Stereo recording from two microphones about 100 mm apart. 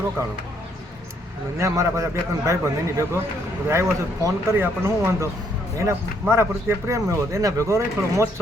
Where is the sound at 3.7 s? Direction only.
25° right (ahead or behind).